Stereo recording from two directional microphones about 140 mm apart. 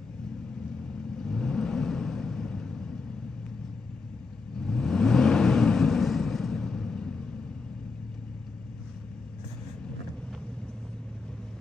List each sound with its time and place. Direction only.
1.1 s vehicle: 5° left (ahead or behind)
4.6 s vehicle: 5° left (ahead or behind)